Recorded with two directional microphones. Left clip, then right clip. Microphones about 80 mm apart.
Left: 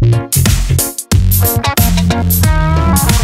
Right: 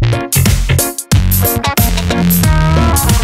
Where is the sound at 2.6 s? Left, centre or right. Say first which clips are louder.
Right 2 dB; centre.